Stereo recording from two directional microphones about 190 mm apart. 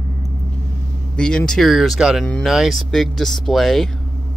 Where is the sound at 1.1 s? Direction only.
5° left (ahead or behind).